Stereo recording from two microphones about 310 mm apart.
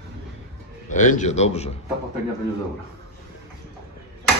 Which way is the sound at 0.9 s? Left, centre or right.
Left.